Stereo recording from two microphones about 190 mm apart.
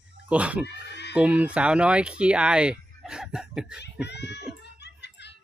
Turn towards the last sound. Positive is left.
turn(degrees=60)  # may be behind; listen again after turning